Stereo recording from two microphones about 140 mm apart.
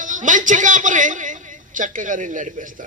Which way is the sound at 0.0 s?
65° right (ahead or behind).